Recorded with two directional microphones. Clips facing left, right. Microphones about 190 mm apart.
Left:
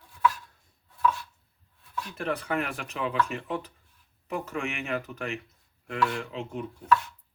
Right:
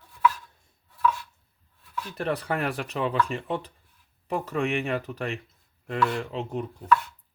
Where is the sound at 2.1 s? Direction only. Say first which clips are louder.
Right 2 dB; 35° right (ahead or behind).